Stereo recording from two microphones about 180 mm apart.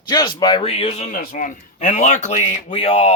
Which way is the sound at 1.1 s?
45° left (ahead or behind).